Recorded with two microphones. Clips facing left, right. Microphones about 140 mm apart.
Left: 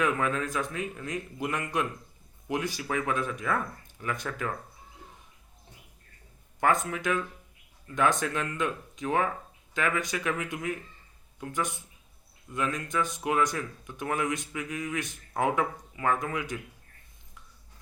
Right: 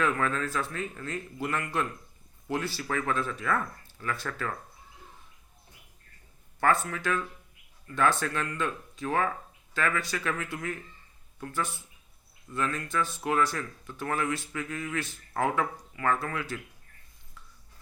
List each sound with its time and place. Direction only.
0.0 s speech: 15° left (ahead or behind)
6.6 s speech: 15° left (ahead or behind)